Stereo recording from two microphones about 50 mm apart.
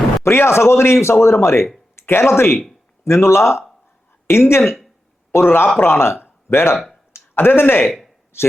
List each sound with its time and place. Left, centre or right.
0.2 s a man's voice: left
7.9 s a sound: centre
8.3 s speech: left